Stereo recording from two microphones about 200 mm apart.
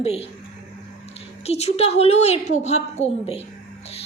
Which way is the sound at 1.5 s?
30° left (ahead or behind).